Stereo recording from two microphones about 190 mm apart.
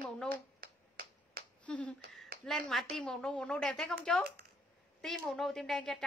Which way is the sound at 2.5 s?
Centre (ahead or behind).